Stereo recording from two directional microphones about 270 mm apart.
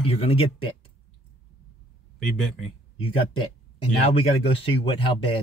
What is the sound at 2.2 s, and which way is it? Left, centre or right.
Speech, centre.